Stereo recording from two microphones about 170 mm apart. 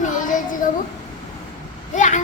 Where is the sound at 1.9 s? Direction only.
45° left (ahead or behind).